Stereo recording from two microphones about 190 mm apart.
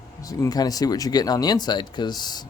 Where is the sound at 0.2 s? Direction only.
20° left (ahead or behind).